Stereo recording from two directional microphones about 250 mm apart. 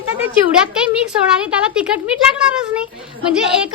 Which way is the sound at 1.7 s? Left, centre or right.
Centre.